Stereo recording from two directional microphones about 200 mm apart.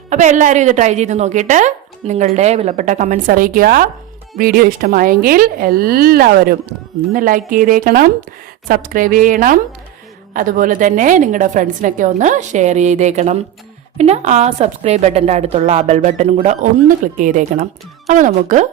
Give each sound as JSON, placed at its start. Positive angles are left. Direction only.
{"t": 0.1, "sound": "a woman's voice", "side_deg": -40}